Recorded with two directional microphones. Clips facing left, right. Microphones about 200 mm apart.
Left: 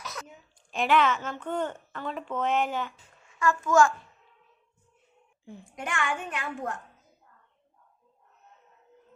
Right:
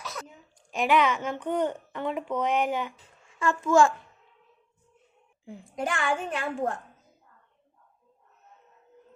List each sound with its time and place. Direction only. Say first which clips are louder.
0.7 s a woman's voice: right 1 dB; 10° right (ahead or behind)
3.3 s a child's voice: right 1 dB; 30° right (ahead or behind)
5.7 s a woman's voice: right 3 dB; 30° right (ahead or behind)